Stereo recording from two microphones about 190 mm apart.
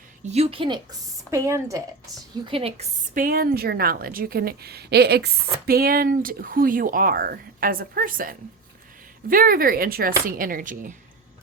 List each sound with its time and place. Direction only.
0.3 s speech: 30° right (ahead or behind)
1.3 s speech: 15° right (ahead or behind)
2.4 s speech: 30° right (ahead or behind)
3.2 s a woman's voice: 50° right (ahead or behind)